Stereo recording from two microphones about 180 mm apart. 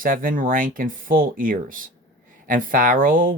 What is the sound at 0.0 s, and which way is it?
Speech, 50° right (ahead or behind).